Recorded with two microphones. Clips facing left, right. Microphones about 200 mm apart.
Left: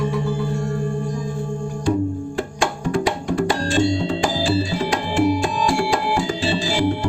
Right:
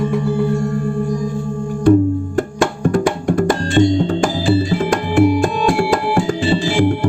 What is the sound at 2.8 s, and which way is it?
Music, 50° right (ahead or behind).